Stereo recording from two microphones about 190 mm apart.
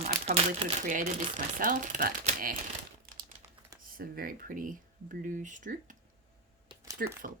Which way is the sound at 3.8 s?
50° right (ahead or behind).